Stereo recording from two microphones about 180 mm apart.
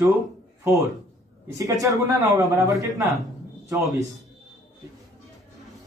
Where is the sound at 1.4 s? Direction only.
20° right (ahead or behind).